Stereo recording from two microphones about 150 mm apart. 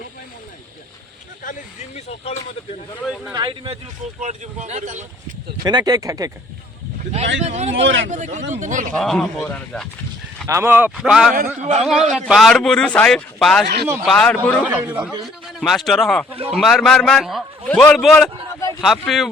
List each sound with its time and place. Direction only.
1.5 s speech: 50° left (ahead or behind)
3.0 s a man's voice: centre (ahead or behind)
3.3 s speech: 35° right (ahead or behind)
4.2 s speech: 50° right (ahead or behind)
5.6 s speech: 25° right (ahead or behind)
7.1 s speech: 50° right (ahead or behind)
8.9 s a man's voice: 5° left (ahead or behind)
10.4 s speech: 20° right (ahead or behind)
11.6 s speech: 50° right (ahead or behind)
12.1 s a man's voice: centre (ahead or behind)
14.7 s speech: 10° right (ahead or behind)
15.2 s a man's voice: centre (ahead or behind)